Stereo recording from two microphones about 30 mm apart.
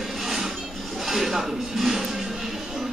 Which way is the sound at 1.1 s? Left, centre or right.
Centre.